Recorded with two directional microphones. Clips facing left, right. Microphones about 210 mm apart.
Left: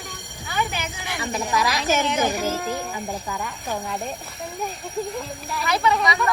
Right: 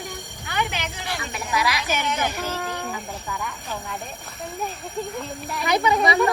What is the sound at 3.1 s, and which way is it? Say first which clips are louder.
Speech: left 2 dB; 40° left (ahead or behind).